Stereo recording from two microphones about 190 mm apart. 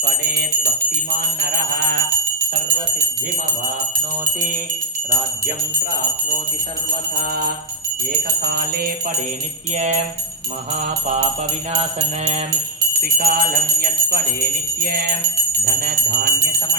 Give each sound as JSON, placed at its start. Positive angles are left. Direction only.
{"t": 0.0, "sound": "music", "side_deg": -60}
{"t": 1.4, "sound": "bell", "side_deg": -55}
{"t": 7.2, "sound": "jingle bell", "side_deg": -50}
{"t": 9.7, "sound": "music", "side_deg": -40}
{"t": 11.7, "sound": "music", "side_deg": -35}
{"t": 13.0, "sound": "jingle bell", "side_deg": -50}
{"t": 14.8, "sound": "bell", "side_deg": -55}